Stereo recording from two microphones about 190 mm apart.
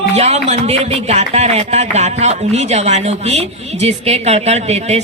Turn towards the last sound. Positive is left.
turn(degrees=-35)  # may be behind; listen again after turning